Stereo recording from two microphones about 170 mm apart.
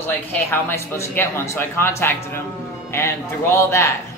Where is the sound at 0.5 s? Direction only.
15° left (ahead or behind).